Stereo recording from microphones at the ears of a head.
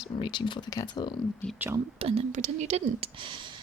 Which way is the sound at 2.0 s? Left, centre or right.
Right.